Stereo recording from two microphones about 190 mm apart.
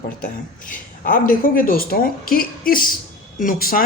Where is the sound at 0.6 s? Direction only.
45° left (ahead or behind).